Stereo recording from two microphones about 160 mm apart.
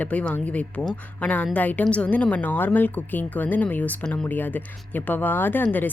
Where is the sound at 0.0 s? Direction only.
10° left (ahead or behind).